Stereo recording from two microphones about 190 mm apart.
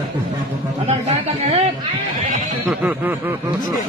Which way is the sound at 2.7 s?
10° right (ahead or behind).